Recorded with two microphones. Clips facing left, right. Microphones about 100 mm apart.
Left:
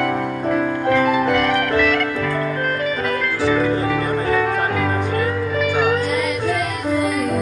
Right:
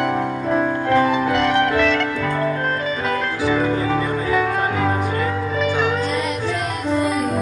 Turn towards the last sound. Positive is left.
turn(degrees=-25)  # may be behind; listen again after turning